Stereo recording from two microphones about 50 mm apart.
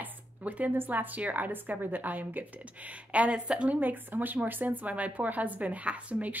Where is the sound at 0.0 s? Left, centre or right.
Right.